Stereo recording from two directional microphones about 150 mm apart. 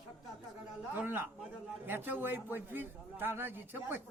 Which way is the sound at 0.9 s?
15° right (ahead or behind).